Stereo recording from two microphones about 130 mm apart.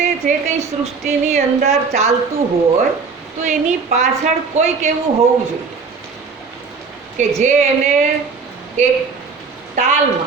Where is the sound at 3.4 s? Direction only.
65° right (ahead or behind).